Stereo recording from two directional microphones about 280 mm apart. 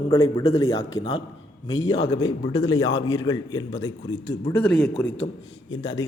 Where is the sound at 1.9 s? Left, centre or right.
Centre.